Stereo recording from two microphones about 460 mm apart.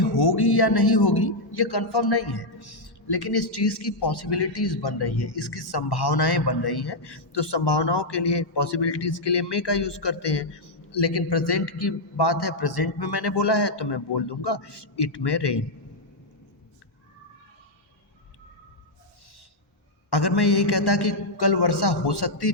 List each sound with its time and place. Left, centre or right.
0.0 s a man's voice: left
20.1 s a man's voice: left